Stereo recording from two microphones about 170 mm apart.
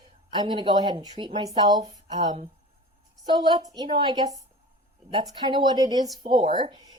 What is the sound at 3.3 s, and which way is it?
Speech, 25° right (ahead or behind).